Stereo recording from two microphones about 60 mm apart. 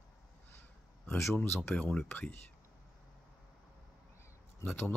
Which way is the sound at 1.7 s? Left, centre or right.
Left.